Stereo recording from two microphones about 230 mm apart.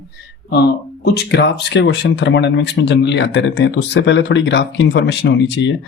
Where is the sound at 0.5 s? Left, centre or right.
Left.